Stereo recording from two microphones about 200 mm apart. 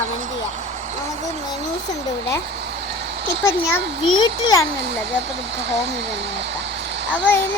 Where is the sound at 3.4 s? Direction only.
15° left (ahead or behind).